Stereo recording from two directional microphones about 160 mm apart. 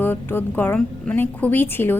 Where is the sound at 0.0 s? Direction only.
15° left (ahead or behind).